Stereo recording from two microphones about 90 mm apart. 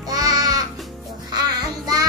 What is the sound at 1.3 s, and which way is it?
Child singing, 45° right (ahead or behind).